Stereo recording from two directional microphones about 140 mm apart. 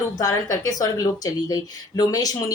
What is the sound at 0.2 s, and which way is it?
A woman's voice, 25° left (ahead or behind).